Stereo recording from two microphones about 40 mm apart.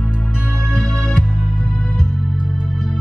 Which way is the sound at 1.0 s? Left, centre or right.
Left.